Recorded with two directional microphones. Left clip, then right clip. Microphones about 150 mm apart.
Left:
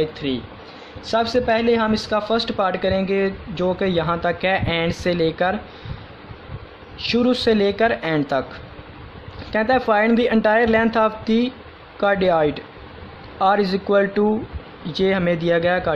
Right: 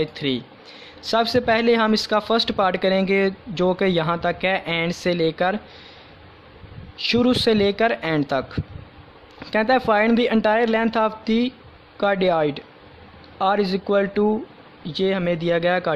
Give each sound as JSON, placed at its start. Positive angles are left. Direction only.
{"t": 0.0, "sound": "speech", "side_deg": -45}
{"t": 7.0, "sound": "a woman's voice", "side_deg": -40}